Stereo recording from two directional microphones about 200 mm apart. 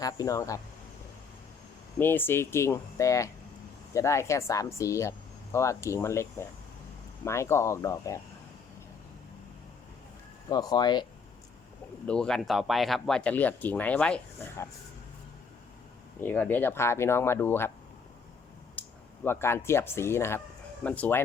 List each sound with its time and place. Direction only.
0.0 s speech: 20° left (ahead or behind)
2.0 s speech: 10° left (ahead or behind)
10.5 s speech: 20° left (ahead or behind)
12.0 s speech: 5° left (ahead or behind)
16.2 s speech: 10° left (ahead or behind)
18.8 s speech: 10° left (ahead or behind)